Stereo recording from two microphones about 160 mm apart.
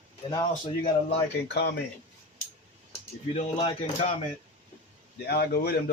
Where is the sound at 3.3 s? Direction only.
40° left (ahead or behind).